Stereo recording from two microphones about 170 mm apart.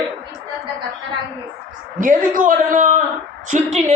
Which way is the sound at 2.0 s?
55° right (ahead or behind).